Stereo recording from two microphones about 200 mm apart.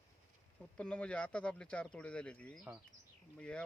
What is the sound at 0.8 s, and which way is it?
Speech, 5° left (ahead or behind).